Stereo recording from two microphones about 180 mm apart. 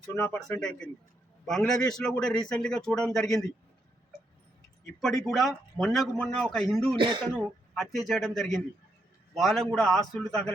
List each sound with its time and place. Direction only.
0.1 s a man's voice: 10° left (ahead or behind)
4.9 s speech: centre (ahead or behind)
6.9 s speech: 25° right (ahead or behind)
7.3 s speech: centre (ahead or behind)